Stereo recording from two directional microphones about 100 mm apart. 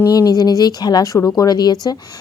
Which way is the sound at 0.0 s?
35° left (ahead or behind).